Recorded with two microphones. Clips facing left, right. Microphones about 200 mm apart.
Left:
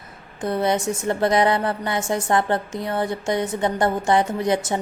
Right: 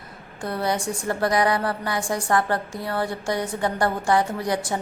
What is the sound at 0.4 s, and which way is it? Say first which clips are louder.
A woman's voice: left 4 dB; 20° left (ahead or behind).